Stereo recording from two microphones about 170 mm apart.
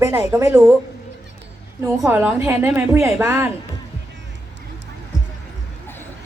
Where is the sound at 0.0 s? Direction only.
15° right (ahead or behind).